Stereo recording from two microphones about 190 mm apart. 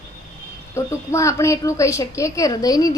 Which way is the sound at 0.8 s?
15° left (ahead or behind).